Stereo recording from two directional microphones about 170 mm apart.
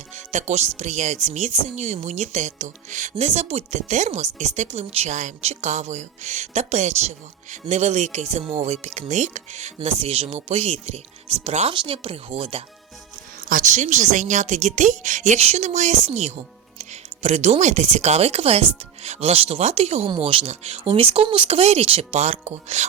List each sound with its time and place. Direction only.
0.3 s speech: 45° right (ahead or behind)
13.5 s speech: 50° right (ahead or behind)